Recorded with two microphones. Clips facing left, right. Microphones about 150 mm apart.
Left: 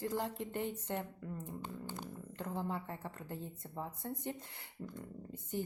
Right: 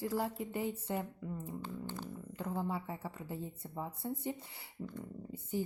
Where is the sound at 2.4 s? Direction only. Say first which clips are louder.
Right 2 dB; 5° right (ahead or behind).